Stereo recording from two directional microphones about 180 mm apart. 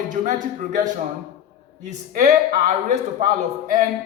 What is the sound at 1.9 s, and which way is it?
A woman's voice, 40° right (ahead or behind).